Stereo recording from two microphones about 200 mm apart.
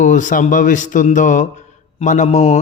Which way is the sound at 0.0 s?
40° left (ahead or behind).